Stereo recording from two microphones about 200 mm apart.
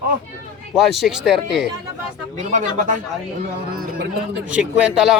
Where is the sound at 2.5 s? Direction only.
40° right (ahead or behind).